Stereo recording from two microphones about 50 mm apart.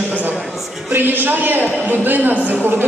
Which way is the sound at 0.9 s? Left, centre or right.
Right.